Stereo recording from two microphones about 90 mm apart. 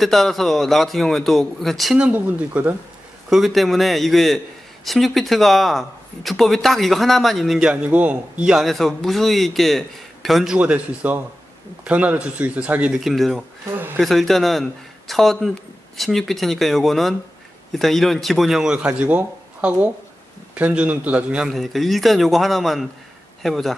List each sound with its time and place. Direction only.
0.0 s a man's voice: centre (ahead or behind)
2.0 s speech: 15° right (ahead or behind)
3.3 s a man's voice: centre (ahead or behind)
7.7 s a man's voice: 15° right (ahead or behind)
13.0 s a man's voice: centre (ahead or behind)
21.5 s a man's voice: centre (ahead or behind)